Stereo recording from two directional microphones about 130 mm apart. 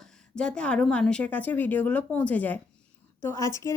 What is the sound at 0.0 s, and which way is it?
Speech, 5° left (ahead or behind).